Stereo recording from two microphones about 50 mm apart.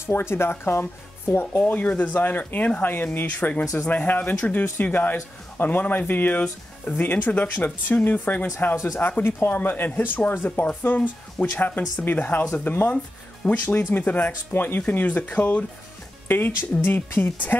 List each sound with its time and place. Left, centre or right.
0.0 s speech: left
1.4 s speech: left
10.9 s speech: left
12.9 s speech: left
13.7 s speech: left
16.3 s speech: left